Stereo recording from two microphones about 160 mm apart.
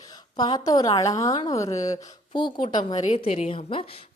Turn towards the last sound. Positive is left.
turn(degrees=35)  # may be behind; listen again after turning